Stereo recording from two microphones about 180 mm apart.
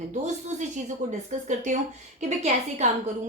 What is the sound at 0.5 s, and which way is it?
A woman's voice, 40° right (ahead or behind).